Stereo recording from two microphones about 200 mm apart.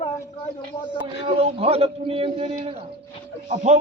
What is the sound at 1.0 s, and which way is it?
A man's voice, 25° right (ahead or behind).